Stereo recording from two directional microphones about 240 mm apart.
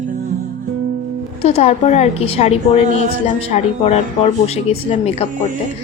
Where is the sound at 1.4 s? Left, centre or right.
Left.